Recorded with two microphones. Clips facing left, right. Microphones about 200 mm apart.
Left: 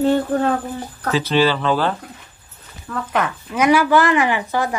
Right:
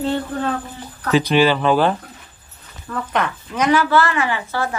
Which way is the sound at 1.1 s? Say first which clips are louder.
Right 2 dB; 15° right (ahead or behind).